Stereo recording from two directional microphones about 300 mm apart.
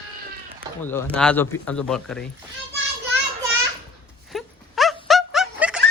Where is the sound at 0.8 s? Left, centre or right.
Centre.